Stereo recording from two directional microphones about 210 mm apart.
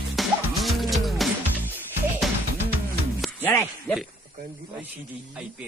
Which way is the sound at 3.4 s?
10° left (ahead or behind).